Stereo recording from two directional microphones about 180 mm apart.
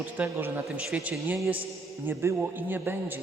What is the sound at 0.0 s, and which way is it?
A man's voice, 10° right (ahead or behind).